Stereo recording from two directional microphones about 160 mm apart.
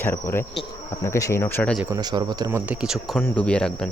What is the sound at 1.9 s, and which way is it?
Speech, 25° right (ahead or behind).